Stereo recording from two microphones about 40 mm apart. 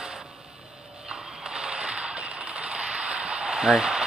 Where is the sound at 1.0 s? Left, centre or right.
Centre.